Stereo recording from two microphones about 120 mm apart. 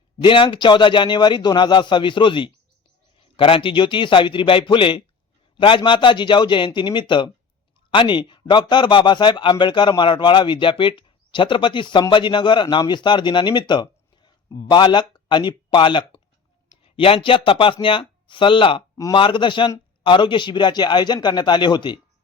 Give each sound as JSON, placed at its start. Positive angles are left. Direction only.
{"t": 0.2, "sound": "speech", "side_deg": 45}